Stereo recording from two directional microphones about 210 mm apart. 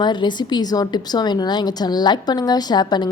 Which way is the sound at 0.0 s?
20° left (ahead or behind).